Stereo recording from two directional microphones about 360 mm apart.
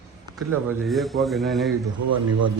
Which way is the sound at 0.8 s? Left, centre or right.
Centre.